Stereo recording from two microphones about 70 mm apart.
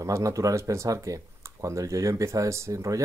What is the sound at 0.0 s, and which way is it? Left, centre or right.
Speech, right.